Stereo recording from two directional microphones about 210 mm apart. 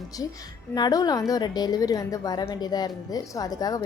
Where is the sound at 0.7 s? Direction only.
20° left (ahead or behind).